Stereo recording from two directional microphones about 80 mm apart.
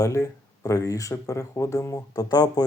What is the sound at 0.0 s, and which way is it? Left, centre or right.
Speech, left.